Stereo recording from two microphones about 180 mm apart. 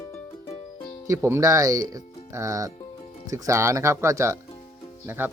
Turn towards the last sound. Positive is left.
turn(degrees=-10)  # may be behind; listen again after turning